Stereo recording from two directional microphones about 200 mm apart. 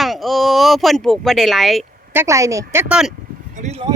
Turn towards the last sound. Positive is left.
turn(degrees=-35)  # may be behind; listen again after turning